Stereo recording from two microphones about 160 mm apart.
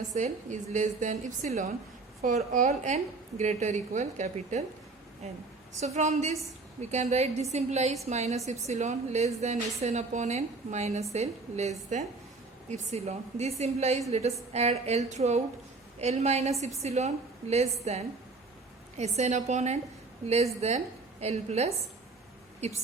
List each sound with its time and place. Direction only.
0.1 s a woman's voice: 50° right (ahead or behind)
5.8 s a woman's voice: 45° right (ahead or behind)